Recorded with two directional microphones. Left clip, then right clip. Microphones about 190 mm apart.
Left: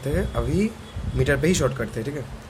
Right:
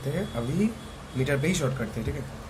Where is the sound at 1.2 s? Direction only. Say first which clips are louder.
Left 6 dB; 50° left (ahead or behind).